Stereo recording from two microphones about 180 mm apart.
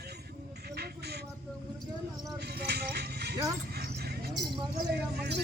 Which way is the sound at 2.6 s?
65° right (ahead or behind).